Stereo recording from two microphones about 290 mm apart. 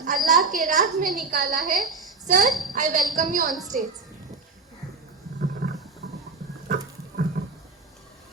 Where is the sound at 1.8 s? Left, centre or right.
Centre.